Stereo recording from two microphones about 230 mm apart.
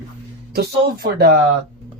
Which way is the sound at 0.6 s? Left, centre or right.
Right.